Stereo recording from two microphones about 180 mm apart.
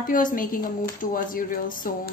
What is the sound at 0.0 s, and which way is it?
A woman's voice, 50° left (ahead or behind).